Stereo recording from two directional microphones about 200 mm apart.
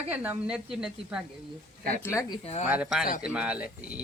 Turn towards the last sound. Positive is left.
turn(degrees=-5)  # may be behind; listen again after turning